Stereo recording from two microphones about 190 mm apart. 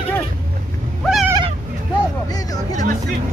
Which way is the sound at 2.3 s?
20° left (ahead or behind).